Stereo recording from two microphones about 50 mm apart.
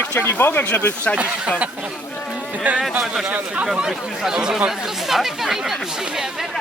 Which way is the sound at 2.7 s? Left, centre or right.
Right.